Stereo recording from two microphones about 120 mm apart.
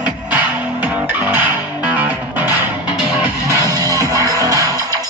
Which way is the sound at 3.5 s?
30° right (ahead or behind).